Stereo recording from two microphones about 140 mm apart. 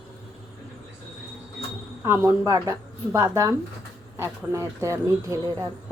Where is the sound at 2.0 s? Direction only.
20° right (ahead or behind).